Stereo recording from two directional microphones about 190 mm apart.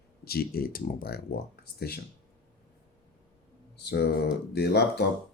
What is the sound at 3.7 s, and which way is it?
Speech, 60° left (ahead or behind).